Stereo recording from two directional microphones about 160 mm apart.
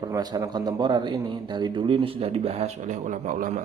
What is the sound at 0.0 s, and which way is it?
A man's voice, 25° right (ahead or behind).